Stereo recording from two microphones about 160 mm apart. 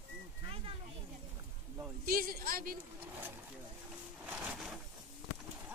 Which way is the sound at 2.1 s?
65° right (ahead or behind).